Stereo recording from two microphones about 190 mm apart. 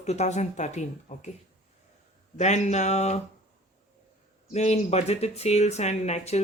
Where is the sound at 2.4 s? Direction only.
35° left (ahead or behind).